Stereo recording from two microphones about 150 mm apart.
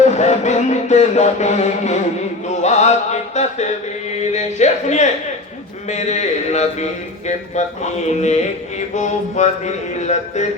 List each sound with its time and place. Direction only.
0.0 s music: 50° left (ahead or behind)
2.5 s speech: 50° left (ahead or behind)